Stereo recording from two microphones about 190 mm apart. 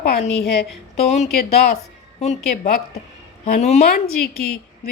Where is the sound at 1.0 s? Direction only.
35° left (ahead or behind).